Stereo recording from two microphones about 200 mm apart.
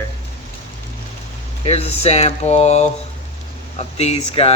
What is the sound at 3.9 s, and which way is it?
Speech, 30° left (ahead or behind).